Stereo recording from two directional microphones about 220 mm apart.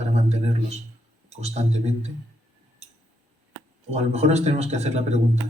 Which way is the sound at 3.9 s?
30° right (ahead or behind).